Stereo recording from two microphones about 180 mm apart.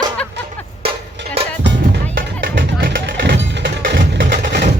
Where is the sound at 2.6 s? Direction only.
65° right (ahead or behind).